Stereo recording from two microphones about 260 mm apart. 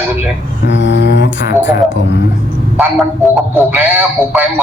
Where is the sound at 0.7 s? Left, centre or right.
Left.